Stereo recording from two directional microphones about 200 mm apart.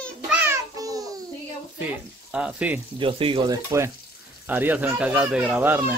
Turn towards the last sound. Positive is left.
turn(degrees=-10)  # may be behind; listen again after turning